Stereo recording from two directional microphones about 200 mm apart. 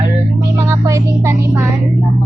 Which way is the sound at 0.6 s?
15° right (ahead or behind).